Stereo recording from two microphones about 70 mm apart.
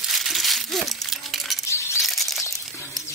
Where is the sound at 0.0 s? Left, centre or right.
Centre.